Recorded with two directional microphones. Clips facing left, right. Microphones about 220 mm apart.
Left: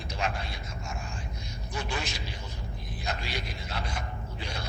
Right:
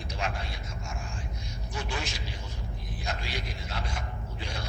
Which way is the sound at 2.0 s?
65° left (ahead or behind).